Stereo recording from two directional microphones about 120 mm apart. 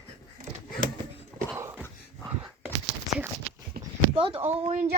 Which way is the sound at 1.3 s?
25° right (ahead or behind).